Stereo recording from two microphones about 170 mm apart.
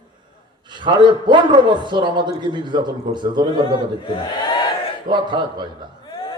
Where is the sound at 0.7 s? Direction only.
25° right (ahead or behind).